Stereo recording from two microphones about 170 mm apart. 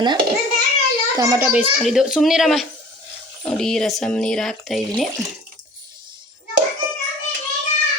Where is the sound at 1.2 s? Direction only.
20° right (ahead or behind).